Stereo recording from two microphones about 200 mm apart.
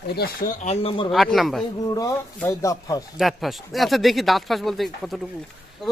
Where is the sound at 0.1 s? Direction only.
50° left (ahead or behind).